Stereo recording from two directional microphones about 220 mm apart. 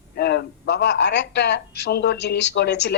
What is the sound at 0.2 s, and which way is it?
Speech, 50° left (ahead or behind).